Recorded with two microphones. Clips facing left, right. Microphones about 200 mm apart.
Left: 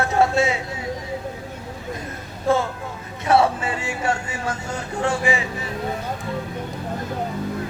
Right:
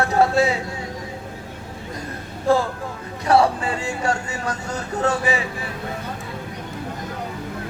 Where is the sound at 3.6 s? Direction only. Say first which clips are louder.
Right 1 dB; 20° left (ahead or behind).